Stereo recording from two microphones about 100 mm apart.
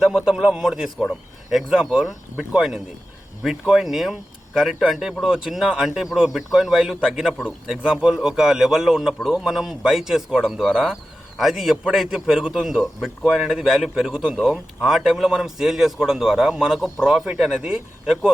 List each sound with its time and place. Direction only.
0.3 s a man's voice: 5° right (ahead or behind)
2.3 s speech: 15° right (ahead or behind)
2.6 s a man's voice: 5° right (ahead or behind)